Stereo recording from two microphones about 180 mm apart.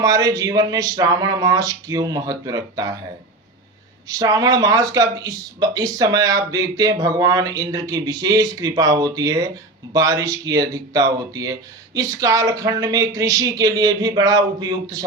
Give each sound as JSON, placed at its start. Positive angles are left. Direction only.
{"t": 0.0, "sound": "speech", "side_deg": -20}
{"t": 4.1, "sound": "speech", "side_deg": -20}